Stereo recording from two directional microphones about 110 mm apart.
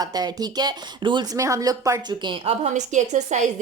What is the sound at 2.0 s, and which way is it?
Speech, 45° right (ahead or behind).